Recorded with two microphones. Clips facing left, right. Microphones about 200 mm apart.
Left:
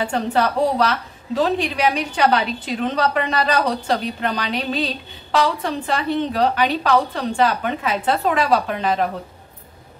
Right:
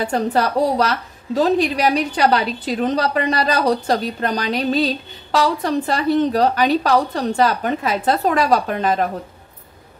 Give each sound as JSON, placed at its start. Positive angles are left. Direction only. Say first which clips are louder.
{"t": 0.0, "sound": "a woman's voice", "louder": "right 1 dB", "side_deg": -40}